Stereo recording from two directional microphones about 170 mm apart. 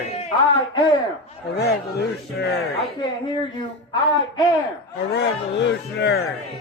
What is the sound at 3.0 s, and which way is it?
Speech, 25° left (ahead or behind).